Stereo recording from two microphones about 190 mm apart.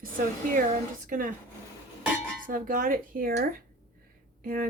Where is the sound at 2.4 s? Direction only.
45° right (ahead or behind).